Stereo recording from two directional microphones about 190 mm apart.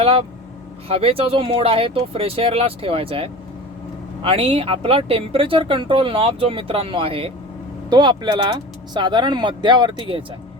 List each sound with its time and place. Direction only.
0.0 s speech: 30° right (ahead or behind)